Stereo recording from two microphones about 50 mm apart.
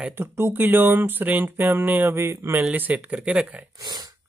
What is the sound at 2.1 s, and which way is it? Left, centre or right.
Speech, right.